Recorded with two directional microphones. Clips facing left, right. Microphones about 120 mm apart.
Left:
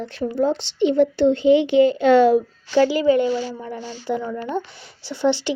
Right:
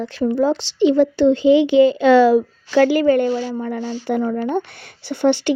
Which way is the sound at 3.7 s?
65° right (ahead or behind).